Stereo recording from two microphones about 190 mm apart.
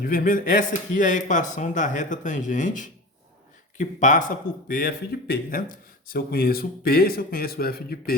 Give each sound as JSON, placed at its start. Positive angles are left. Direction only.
{"t": 0.0, "sound": "speech", "side_deg": 50}